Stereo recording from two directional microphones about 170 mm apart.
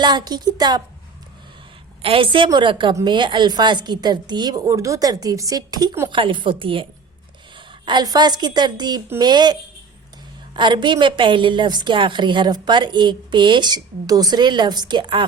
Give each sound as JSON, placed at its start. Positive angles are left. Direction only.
{"t": 0.0, "sound": "a woman's voice", "side_deg": -25}
{"t": 2.0, "sound": "a woman's voice", "side_deg": -35}